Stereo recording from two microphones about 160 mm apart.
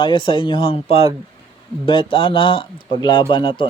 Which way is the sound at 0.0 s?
30° left (ahead or behind).